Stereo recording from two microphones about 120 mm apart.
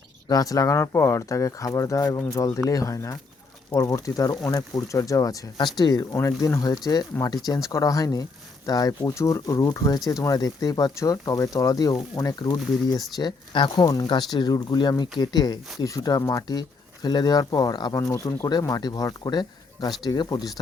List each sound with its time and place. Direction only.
0.3 s speech: 30° left (ahead or behind)
6.1 s speech: 25° left (ahead or behind)